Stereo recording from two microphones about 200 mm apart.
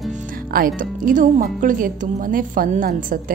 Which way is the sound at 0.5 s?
45° right (ahead or behind).